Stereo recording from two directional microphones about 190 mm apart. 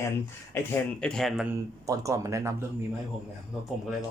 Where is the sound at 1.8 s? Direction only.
15° right (ahead or behind).